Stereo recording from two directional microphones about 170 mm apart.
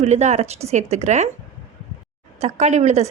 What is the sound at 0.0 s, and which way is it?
A woman's voice, 40° right (ahead or behind).